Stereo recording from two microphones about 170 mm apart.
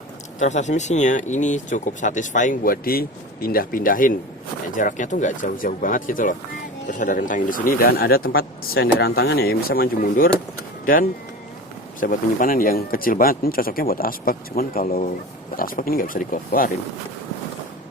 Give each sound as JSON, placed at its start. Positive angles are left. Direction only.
{"t": 0.3, "sound": "speech", "side_deg": 45}